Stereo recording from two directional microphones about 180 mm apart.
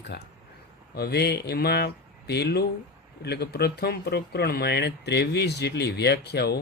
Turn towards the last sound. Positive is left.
turn(degrees=65)  # may be behind; listen again after turning